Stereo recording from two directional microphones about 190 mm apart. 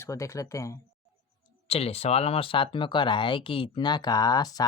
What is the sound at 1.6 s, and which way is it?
Speech, 30° left (ahead or behind).